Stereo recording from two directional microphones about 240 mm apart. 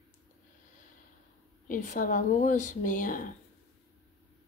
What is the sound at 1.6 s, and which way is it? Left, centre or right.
A woman's voice, left.